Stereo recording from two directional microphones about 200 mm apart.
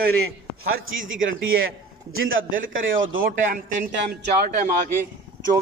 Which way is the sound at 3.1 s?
45° right (ahead or behind).